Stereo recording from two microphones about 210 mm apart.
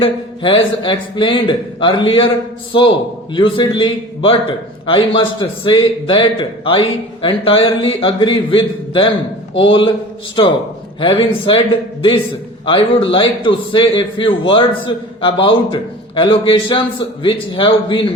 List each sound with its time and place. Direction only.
0.0 s a man's voice: 25° left (ahead or behind)
3.3 s a man's voice: 25° left (ahead or behind)
12.6 s a man's voice: 25° left (ahead or behind)